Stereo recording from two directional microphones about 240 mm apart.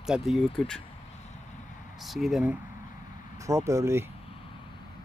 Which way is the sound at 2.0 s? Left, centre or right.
Centre.